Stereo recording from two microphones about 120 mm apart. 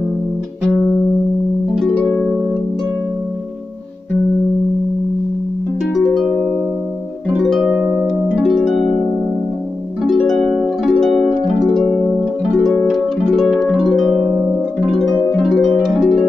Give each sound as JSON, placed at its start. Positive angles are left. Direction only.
{"t": 2.0, "sound": "harp", "side_deg": 10}
{"t": 5.9, "sound": "harp", "side_deg": 0}
{"t": 7.3, "sound": "harp", "side_deg": 0}
{"t": 7.8, "sound": "harp", "side_deg": -20}
{"t": 8.3, "sound": "harp", "side_deg": -5}
{"t": 10.0, "sound": "harp", "side_deg": 0}
{"t": 14.2, "sound": "harp", "side_deg": -20}
{"t": 14.9, "sound": "harp", "side_deg": 0}